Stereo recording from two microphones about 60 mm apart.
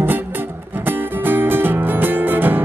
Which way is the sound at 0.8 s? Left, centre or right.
Right.